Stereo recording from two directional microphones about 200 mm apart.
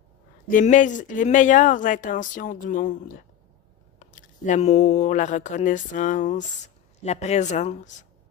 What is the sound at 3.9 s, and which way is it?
Speech, 40° left (ahead or behind).